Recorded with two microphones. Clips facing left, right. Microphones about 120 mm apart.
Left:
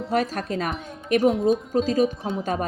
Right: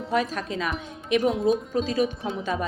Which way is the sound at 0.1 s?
45° left (ahead or behind).